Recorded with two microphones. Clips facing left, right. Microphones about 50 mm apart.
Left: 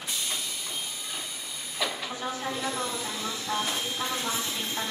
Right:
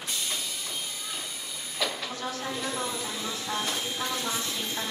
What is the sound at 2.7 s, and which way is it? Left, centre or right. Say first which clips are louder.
Vehicle: even; centre.